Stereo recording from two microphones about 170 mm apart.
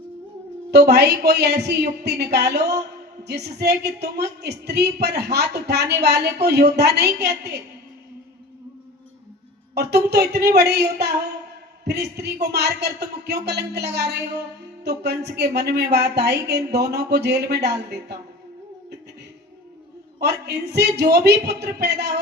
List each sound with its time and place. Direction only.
0.7 s speech: 70° right (ahead or behind)
9.7 s speech: 75° right (ahead or behind)
20.1 s speech: 75° right (ahead or behind)